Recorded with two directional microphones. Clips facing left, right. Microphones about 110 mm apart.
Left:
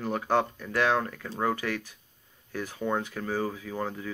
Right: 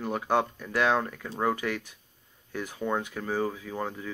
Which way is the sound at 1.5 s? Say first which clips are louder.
Even; 15° right (ahead or behind).